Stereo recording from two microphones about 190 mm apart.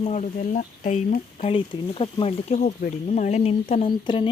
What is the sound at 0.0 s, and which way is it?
Speech, 35° left (ahead or behind).